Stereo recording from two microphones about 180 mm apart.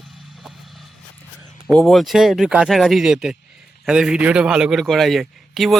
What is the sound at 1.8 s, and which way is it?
A man's voice, centre (ahead or behind).